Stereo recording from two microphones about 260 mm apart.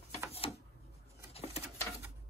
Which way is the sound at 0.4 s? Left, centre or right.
Left.